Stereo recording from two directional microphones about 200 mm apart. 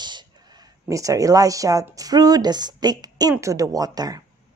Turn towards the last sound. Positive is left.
turn(degrees=-20)  # may be behind; listen again after turning